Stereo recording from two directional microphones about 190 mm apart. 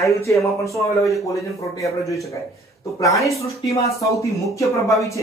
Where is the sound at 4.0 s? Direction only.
15° left (ahead or behind).